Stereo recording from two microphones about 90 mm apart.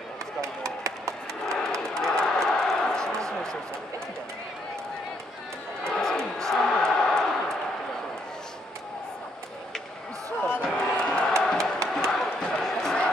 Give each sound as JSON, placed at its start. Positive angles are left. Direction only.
{"t": 0.4, "sound": "chop", "side_deg": -35}
{"t": 1.4, "sound": "crowd", "side_deg": 5}
{"t": 5.9, "sound": "crowd", "side_deg": 5}
{"t": 10.6, "sound": "music", "side_deg": 10}
{"t": 12.0, "sound": "crowd", "side_deg": 5}